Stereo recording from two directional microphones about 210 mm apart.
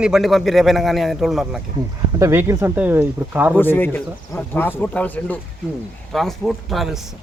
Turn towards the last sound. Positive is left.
turn(degrees=0)  # may be behind; listen again after turning